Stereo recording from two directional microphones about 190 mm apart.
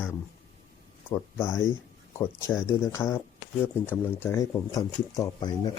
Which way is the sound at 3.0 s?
15° left (ahead or behind).